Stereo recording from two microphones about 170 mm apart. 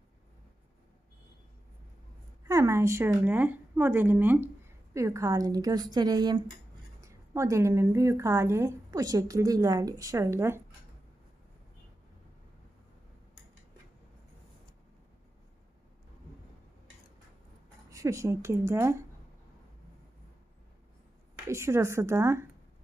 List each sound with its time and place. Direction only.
2.4 s a woman's voice: 15° right (ahead or behind)
17.8 s a woman's voice: 20° right (ahead or behind)
21.5 s a woman's voice: 15° right (ahead or behind)